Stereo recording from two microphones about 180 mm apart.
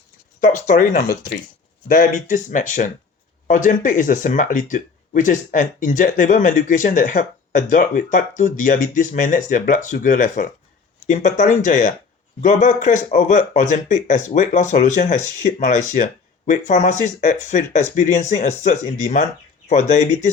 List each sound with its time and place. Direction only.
0.3 s speech: 45° left (ahead or behind)